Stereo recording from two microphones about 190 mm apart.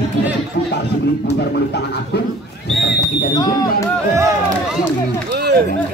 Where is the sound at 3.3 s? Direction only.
20° left (ahead or behind).